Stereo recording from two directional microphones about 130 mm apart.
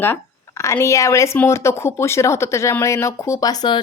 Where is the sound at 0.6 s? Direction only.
20° left (ahead or behind).